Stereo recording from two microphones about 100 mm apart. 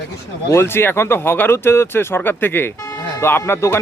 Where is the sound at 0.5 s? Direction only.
25° left (ahead or behind).